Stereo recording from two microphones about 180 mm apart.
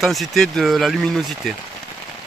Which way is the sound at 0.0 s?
Centre (ahead or behind).